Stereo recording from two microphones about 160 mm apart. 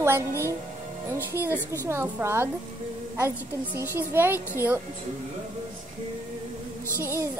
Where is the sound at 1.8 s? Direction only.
15° right (ahead or behind).